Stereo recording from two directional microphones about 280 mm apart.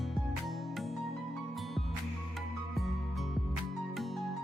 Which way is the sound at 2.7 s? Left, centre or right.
Centre.